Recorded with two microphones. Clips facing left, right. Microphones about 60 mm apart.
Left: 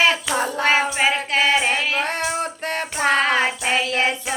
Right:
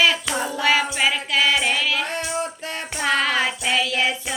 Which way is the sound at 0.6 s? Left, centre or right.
Left.